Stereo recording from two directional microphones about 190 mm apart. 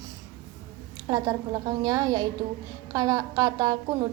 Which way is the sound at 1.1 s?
20° right (ahead or behind).